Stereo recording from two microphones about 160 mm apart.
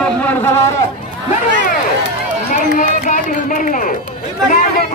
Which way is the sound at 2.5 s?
60° left (ahead or behind).